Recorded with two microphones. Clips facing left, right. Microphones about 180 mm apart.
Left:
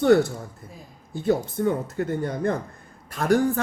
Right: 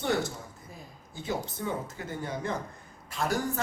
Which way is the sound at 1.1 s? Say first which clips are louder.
Left 11 dB; 55° left (ahead or behind).